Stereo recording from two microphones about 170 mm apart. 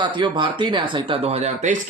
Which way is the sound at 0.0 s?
30° right (ahead or behind).